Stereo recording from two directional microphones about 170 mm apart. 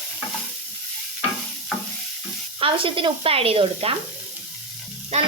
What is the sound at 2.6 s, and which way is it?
Speech, 30° right (ahead or behind).